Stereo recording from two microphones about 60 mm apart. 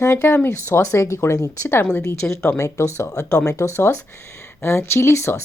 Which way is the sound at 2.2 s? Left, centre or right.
Left.